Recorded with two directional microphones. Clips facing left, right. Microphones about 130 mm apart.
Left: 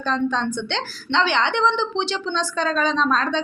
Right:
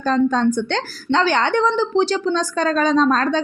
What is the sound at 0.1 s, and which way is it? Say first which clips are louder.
A woman's voice: right 6 dB; 40° right (ahead or behind).